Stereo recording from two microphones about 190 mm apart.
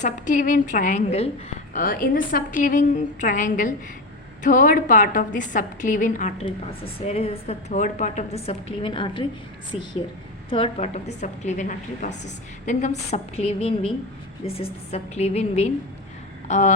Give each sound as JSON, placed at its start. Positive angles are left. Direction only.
{"t": 0.0, "sound": "a woman's voice", "side_deg": 45}
{"t": 1.7, "sound": "a woman's voice", "side_deg": 45}
{"t": 6.4, "sound": "a woman's voice", "side_deg": 30}